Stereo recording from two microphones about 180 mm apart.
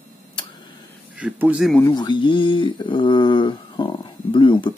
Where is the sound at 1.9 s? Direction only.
25° left (ahead or behind).